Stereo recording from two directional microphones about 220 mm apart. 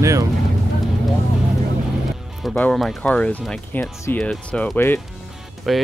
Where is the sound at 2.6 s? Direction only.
Centre (ahead or behind).